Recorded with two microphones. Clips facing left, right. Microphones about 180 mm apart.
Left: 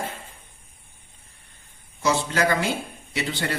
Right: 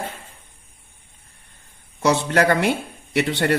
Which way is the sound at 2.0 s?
65° right (ahead or behind).